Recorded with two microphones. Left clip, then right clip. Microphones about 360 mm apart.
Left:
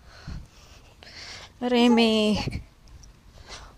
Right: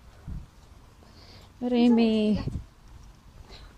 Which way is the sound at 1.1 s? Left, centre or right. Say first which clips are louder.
Left 13 dB; left.